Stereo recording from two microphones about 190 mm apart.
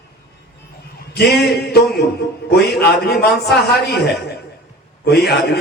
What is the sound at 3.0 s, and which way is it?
Speech, 60° left (ahead or behind).